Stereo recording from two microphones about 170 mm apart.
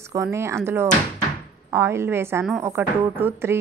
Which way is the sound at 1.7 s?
15° right (ahead or behind).